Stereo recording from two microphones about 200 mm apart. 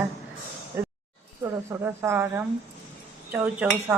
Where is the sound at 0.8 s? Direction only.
10° right (ahead or behind).